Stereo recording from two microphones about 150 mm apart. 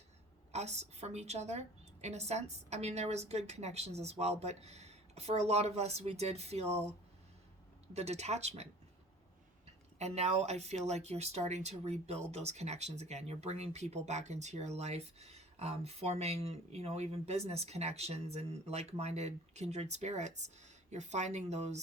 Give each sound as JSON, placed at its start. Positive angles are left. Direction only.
{"t": 0.5, "sound": "speech", "side_deg": -50}
{"t": 7.9, "sound": "speech", "side_deg": -45}
{"t": 10.0, "sound": "speech", "side_deg": -45}